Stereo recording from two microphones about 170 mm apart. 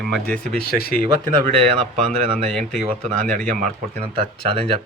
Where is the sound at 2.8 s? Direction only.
40° right (ahead or behind).